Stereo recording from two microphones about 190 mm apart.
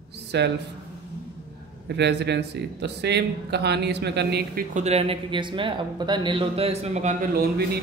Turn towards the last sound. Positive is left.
turn(degrees=-55)  # may be behind; listen again after turning